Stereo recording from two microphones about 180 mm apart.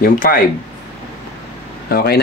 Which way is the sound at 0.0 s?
50° left (ahead or behind).